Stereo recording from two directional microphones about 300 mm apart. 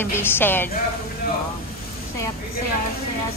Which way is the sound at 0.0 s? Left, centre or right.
Centre.